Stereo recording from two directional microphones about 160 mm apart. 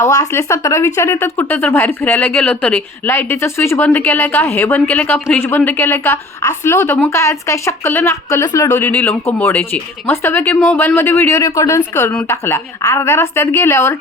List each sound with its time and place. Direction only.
0.0 s speech: 20° left (ahead or behind)